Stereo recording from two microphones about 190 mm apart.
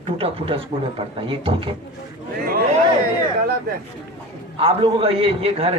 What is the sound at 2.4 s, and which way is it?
Speech, 50° right (ahead or behind).